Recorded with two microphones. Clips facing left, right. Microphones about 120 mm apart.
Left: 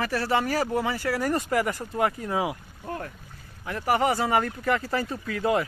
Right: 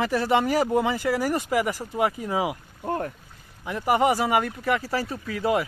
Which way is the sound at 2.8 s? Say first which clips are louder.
Right 6 dB; 35° right (ahead or behind).